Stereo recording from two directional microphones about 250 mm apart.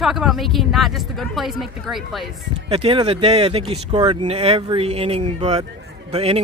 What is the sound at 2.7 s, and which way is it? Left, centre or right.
Speech, right.